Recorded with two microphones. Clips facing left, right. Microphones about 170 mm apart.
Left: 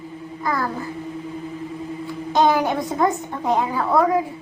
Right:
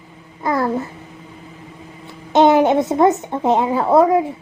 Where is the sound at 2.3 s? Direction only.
25° right (ahead or behind).